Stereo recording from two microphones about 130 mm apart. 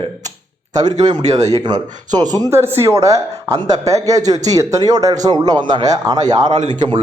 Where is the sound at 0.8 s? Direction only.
30° right (ahead or behind).